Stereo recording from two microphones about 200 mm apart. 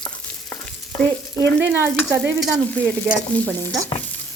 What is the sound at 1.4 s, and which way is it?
Stir, 65° right (ahead or behind).